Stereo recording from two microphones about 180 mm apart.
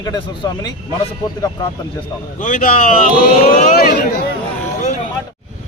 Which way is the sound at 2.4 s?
45° left (ahead or behind).